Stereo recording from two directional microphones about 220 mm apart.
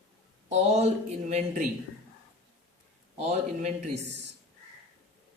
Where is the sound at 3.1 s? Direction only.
30° right (ahead or behind).